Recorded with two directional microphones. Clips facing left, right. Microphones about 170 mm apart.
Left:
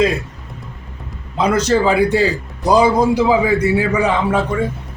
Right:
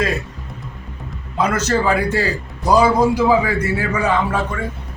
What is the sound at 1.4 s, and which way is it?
A man's voice, 15° left (ahead or behind).